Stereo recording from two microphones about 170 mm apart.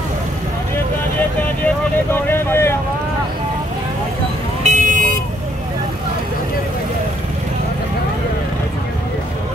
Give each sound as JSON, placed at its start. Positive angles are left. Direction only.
{"t": 2.1, "sound": "vehicle", "side_deg": 10}
{"t": 4.6, "sound": "vehicle", "side_deg": -45}